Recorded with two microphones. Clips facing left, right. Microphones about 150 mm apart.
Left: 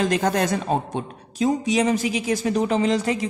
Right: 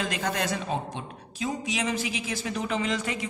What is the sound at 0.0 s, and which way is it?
A woman's voice, 45° left (ahead or behind).